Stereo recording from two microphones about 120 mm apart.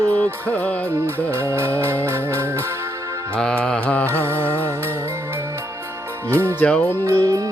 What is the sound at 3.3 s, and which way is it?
Mantra, 10° left (ahead or behind).